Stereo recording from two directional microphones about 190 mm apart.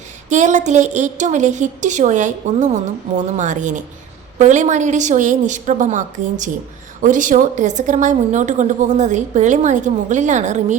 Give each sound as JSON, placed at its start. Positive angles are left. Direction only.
{"t": 0.3, "sound": "a woman's voice", "side_deg": -40}